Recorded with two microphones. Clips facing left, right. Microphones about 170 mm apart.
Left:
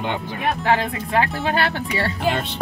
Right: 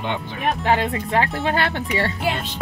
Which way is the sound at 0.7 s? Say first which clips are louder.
Right 1 dB; 20° right (ahead or behind).